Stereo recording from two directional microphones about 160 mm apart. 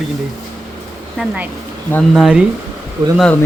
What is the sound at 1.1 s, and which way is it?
Speech, 10° right (ahead or behind).